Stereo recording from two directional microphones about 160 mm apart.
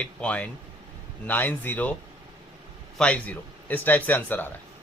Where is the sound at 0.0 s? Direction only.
5° left (ahead or behind).